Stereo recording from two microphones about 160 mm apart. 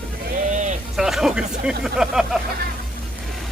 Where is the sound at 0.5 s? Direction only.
50° right (ahead or behind).